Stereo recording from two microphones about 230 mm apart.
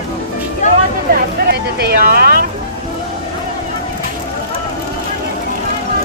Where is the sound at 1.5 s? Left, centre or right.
Right.